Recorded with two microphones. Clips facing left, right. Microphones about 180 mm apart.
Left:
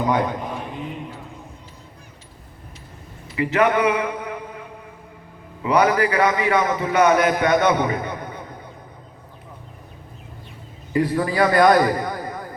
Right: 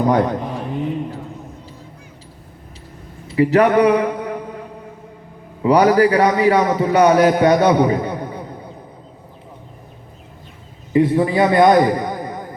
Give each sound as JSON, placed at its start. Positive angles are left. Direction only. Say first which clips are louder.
{"t": 0.0, "sound": "a man's voice", "louder": "right 5 dB", "side_deg": -40}
{"t": 3.2, "sound": "a sound", "louder": "right 5 dB", "side_deg": -35}
{"t": 5.6, "sound": "a man's voice", "louder": "right 6 dB", "side_deg": -35}
{"t": 10.9, "sound": "a man's voice", "louder": "right 5 dB", "side_deg": -25}